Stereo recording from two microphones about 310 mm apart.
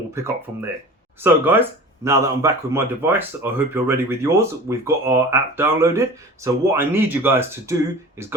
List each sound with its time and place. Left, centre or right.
0.1 s speech: centre